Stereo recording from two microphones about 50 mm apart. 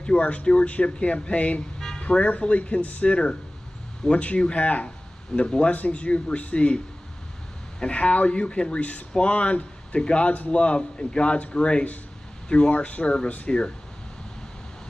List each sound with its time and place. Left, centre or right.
0.0 s speech: left
1.8 s a sound: centre
2.0 s speech: left
7.8 s speech: left